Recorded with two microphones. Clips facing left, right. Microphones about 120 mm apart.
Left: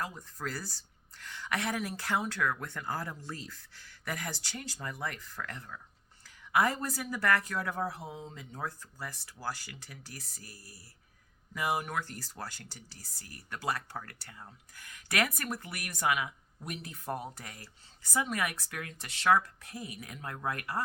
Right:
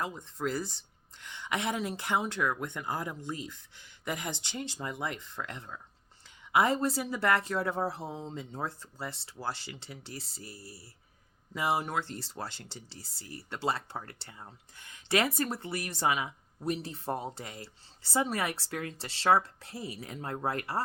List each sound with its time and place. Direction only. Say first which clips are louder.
0.0 s speech: right 4 dB; 25° right (ahead or behind)